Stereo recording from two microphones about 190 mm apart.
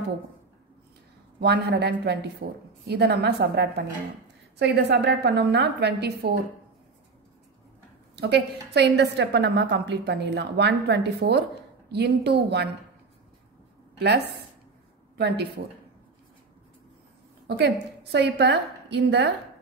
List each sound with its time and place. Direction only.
1.4 s a woman's voice: 65° right (ahead or behind)
8.2 s a woman's voice: 65° right (ahead or behind)
13.9 s a woman's voice: 60° right (ahead or behind)
17.5 s a woman's voice: 65° right (ahead or behind)